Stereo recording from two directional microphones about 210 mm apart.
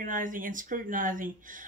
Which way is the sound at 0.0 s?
40° right (ahead or behind).